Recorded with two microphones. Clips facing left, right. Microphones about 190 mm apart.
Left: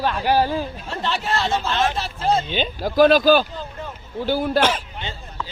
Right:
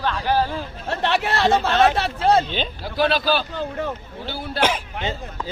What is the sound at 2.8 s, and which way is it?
Speech, 45° left (ahead or behind).